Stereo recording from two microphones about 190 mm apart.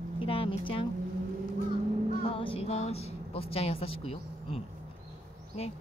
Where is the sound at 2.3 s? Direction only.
30° left (ahead or behind).